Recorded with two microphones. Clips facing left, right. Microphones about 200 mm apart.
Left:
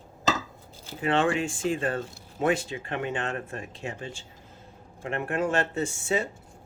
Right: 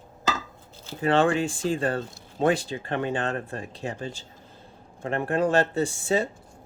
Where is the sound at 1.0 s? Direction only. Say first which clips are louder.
Right 3 dB; 35° right (ahead or behind).